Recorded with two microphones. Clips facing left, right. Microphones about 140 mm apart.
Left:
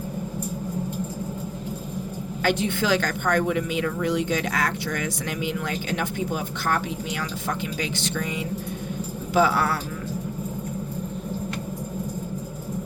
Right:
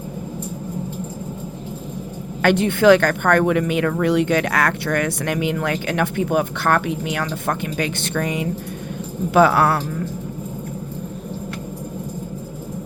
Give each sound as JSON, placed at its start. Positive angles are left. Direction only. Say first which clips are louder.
{"t": 2.4, "sound": "a woman's voice", "louder": "right 8 dB", "side_deg": -60}